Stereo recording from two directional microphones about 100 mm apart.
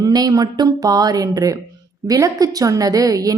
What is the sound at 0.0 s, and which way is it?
A woman's voice, 40° right (ahead or behind).